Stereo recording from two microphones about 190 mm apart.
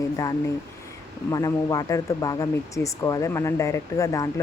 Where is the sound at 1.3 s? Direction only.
20° left (ahead or behind).